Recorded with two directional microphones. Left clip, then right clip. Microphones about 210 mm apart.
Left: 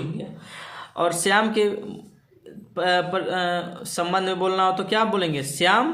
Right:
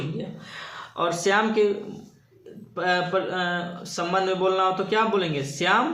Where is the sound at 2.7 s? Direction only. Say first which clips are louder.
Left 2 dB; 40° left (ahead or behind).